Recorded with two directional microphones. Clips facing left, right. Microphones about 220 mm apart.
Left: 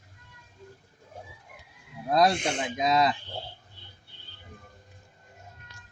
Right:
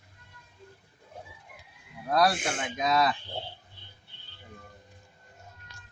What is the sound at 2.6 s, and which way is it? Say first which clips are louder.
Speech: left 1 dB; 20° left (ahead or behind).